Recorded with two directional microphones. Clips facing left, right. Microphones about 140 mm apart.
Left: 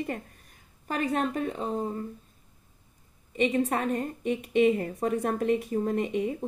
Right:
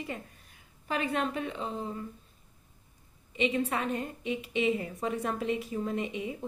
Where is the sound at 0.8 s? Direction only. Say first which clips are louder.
Left 3 dB; 45° left (ahead or behind).